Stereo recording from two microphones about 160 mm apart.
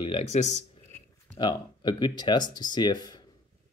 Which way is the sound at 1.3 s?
30° left (ahead or behind).